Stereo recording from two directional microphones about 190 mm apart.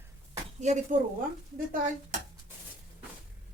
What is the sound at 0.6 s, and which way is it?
Speech, 40° right (ahead or behind).